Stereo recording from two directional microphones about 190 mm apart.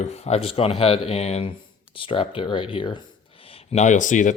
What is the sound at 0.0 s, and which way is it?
Speech, 35° left (ahead or behind).